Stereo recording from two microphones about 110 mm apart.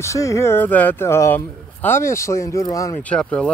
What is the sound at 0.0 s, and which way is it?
Speech, 30° left (ahead or behind).